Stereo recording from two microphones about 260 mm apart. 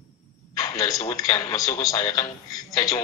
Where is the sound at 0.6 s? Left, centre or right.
Centre.